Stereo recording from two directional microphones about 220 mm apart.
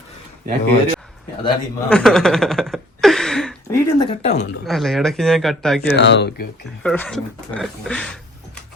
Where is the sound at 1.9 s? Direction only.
Centre (ahead or behind).